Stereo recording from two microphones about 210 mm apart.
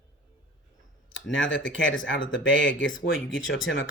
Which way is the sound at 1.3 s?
60° left (ahead or behind).